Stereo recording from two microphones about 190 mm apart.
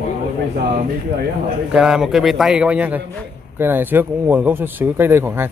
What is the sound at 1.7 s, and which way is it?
Speech, 5° right (ahead or behind).